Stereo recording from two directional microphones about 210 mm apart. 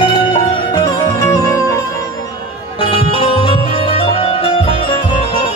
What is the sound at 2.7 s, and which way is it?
Music, 25° left (ahead or behind).